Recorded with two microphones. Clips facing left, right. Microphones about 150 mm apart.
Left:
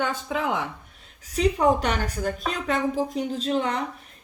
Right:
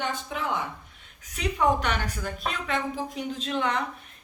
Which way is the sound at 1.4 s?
35° left (ahead or behind).